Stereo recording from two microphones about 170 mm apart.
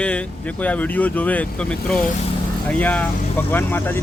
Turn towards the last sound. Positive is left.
turn(degrees=10)  # may be behind; listen again after turning